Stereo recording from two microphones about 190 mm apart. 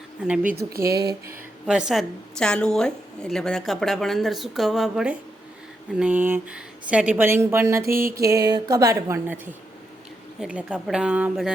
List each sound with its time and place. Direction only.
0.8 s speech: 20° right (ahead or behind)
1.6 s a woman's voice: 5° right (ahead or behind)
7.9 s music: 50° right (ahead or behind)
8.1 s a woman's voice: 15° right (ahead or behind)